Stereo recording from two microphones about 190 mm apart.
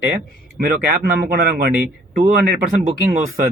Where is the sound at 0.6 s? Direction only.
55° right (ahead or behind).